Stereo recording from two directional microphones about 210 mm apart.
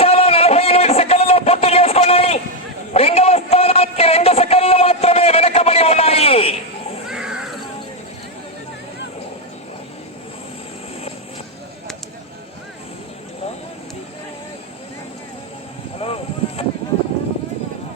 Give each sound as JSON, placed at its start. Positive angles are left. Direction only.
{"t": 0.0, "sound": "a sound", "side_deg": 30}
{"t": 7.1, "sound": "crow", "side_deg": -5}
{"t": 16.0, "sound": "vehicle", "side_deg": 30}